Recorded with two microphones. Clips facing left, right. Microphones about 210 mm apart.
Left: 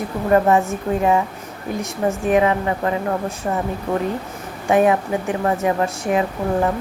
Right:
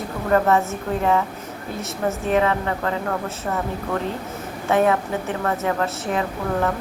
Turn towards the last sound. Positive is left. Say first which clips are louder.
# left 3 dB
turn(degrees=15)  # may be behind; listen again after turning